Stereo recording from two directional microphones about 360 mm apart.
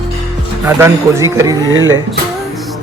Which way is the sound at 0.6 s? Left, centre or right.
Centre.